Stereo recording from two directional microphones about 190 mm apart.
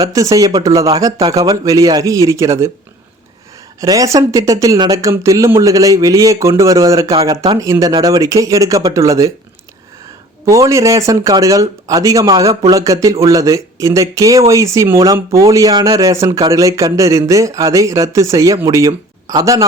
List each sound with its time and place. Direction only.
0.0 s speech: 20° right (ahead or behind)
3.8 s speech: 20° right (ahead or behind)
10.4 s speech: 15° right (ahead or behind)
12.7 s speech: 15° right (ahead or behind)